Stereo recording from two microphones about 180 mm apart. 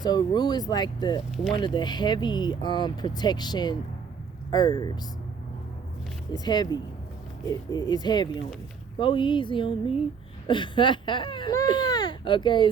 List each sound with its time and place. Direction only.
0.0 s speech: 25° left (ahead or behind)
6.3 s speech: 20° left (ahead or behind)